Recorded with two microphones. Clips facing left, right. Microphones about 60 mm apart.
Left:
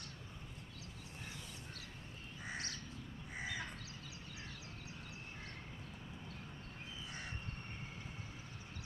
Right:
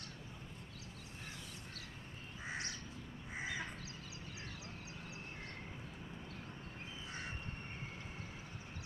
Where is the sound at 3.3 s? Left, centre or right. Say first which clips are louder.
Right 2 dB; centre.